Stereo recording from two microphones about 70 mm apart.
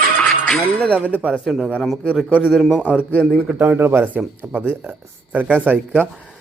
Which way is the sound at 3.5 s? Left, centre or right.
Right.